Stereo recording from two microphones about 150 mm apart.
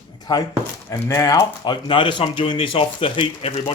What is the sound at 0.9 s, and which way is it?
Speech, 20° left (ahead or behind).